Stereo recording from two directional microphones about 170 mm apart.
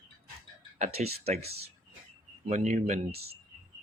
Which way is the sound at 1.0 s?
45° right (ahead or behind).